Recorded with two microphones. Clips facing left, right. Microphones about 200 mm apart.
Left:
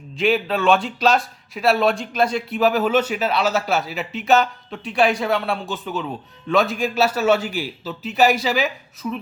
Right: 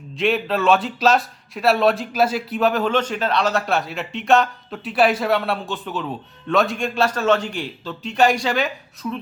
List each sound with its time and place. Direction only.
0.2 s a man's voice: centre (ahead or behind)